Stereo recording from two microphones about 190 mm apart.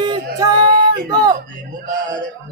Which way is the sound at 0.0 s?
25° right (ahead or behind).